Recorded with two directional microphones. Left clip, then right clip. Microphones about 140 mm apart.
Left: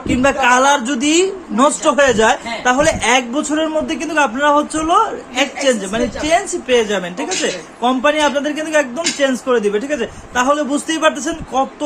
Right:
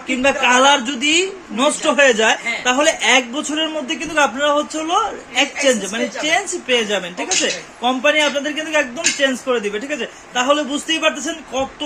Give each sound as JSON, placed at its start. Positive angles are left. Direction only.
{"t": 0.2, "sound": "a man's voice", "side_deg": 10}